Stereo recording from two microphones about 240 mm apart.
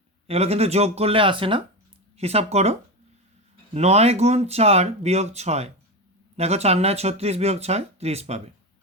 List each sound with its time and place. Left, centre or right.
0.3 s speech: right
3.8 s speech: right